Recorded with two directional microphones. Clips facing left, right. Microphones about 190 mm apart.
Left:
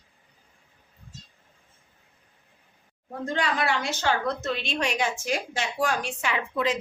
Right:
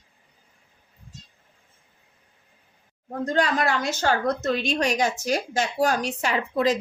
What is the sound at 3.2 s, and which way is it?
A woman's voice, 45° right (ahead or behind).